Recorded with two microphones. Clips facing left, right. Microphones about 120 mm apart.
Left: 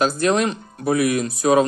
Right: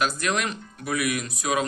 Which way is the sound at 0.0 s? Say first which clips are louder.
Left 7 dB; 30° left (ahead or behind).